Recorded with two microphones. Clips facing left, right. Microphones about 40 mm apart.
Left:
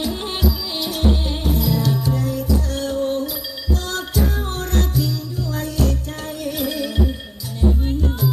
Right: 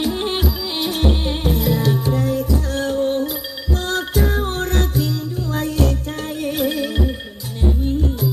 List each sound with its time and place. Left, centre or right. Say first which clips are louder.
0.0 s music: right 2 dB; right